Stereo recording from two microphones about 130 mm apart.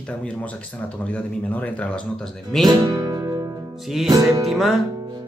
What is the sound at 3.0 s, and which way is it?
Music, 30° right (ahead or behind).